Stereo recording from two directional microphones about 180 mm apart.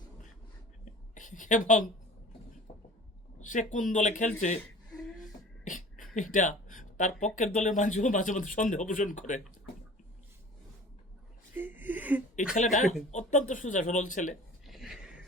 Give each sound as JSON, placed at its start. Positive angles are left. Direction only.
{"t": 1.1, "sound": "a woman's voice", "side_deg": 45}
{"t": 3.4, "sound": "speech", "side_deg": 45}
{"t": 5.6, "sound": "speech", "side_deg": 45}
{"t": 11.5, "sound": "a sound", "side_deg": -10}
{"t": 12.5, "sound": "speech", "side_deg": 45}
{"t": 14.7, "sound": "a sound", "side_deg": 0}